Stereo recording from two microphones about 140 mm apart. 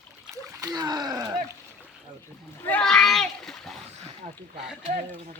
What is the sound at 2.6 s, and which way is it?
A child's voice, 10° left (ahead or behind).